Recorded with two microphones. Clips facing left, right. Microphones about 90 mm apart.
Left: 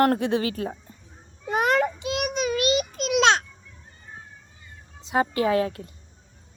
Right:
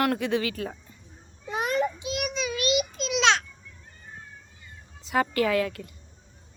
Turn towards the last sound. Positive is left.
turn(degrees=30)  # may be behind; listen again after turning